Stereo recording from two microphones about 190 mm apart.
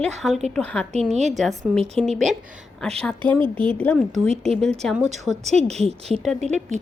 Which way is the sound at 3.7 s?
5° left (ahead or behind).